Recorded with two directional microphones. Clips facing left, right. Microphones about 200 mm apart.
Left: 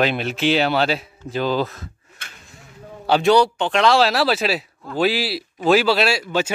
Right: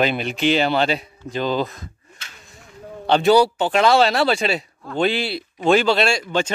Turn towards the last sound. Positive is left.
turn(degrees=5)  # may be behind; listen again after turning